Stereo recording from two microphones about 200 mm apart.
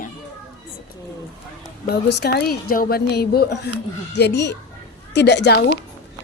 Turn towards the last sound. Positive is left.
turn(degrees=55)  # may be behind; listen again after turning